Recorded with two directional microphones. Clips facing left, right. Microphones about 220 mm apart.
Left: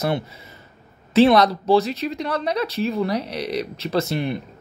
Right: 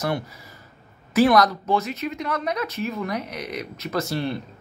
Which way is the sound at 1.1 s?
25° left (ahead or behind).